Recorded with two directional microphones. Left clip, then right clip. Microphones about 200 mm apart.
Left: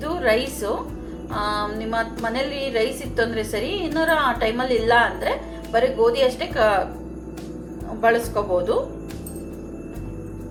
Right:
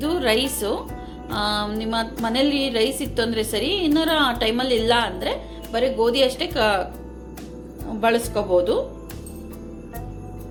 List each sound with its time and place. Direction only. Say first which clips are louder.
0.0 s a woman's voice: even; 45° right (ahead or behind)
8.0 s a woman's voice: left 1 dB; 45° right (ahead or behind)